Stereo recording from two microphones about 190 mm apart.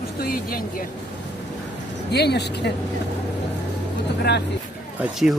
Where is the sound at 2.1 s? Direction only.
60° left (ahead or behind).